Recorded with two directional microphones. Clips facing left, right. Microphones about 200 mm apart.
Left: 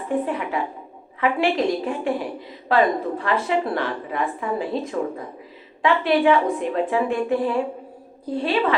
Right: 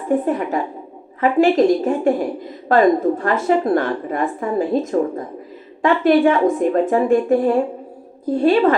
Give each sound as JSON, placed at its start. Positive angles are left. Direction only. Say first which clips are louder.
{"t": 0.3, "sound": "a woman's voice", "louder": "right 5 dB", "side_deg": -45}